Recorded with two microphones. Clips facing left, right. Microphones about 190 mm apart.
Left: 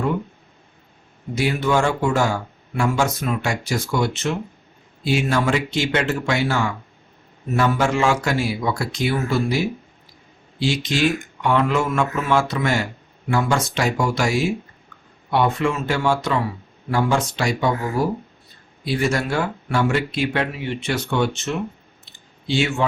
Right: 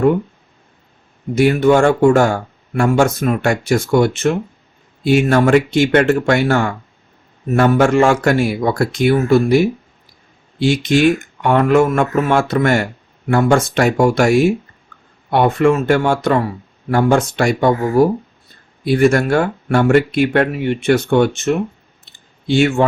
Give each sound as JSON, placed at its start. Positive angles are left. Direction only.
{"t": 1.4, "sound": "speech", "side_deg": -55}